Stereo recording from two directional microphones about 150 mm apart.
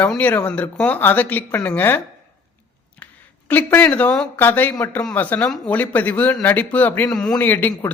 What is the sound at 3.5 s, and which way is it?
A man's voice, 15° left (ahead or behind).